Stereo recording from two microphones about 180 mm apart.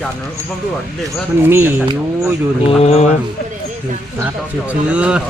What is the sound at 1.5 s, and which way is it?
Speech, 10° right (ahead or behind).